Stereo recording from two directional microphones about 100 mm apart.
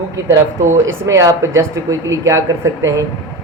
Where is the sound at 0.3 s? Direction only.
30° right (ahead or behind).